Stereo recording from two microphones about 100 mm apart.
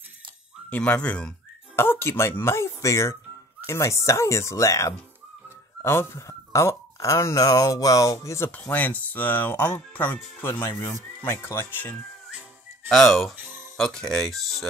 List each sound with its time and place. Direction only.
0.7 s speech: 15° left (ahead or behind)
1.8 s speech: 25° left (ahead or behind)
8.5 s speech: 15° left (ahead or behind)
12.8 s speech: centre (ahead or behind)
13.4 s music: 20° right (ahead or behind)
13.7 s speech: 5° left (ahead or behind)